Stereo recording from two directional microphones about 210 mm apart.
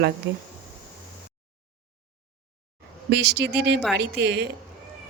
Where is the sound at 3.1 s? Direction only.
55° right (ahead or behind).